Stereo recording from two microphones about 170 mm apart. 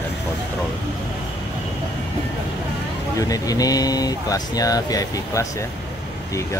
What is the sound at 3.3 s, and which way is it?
Speech, 20° left (ahead or behind).